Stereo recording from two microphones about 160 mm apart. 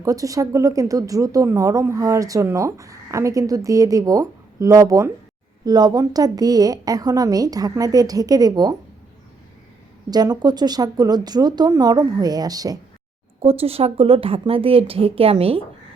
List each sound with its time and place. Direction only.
0.0 s speech: 20° right (ahead or behind)
10.1 s speech: 25° right (ahead or behind)
13.4 s speech: 35° right (ahead or behind)